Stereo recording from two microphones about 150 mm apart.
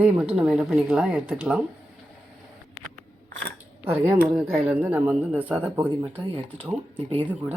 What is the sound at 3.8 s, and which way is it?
Speech, 15° right (ahead or behind).